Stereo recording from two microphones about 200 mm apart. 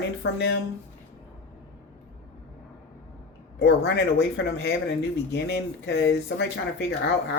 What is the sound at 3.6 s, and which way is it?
Speech, 60° left (ahead or behind).